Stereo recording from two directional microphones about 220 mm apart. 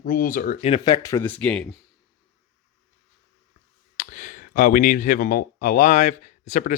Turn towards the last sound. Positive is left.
turn(degrees=35)  # may be behind; listen again after turning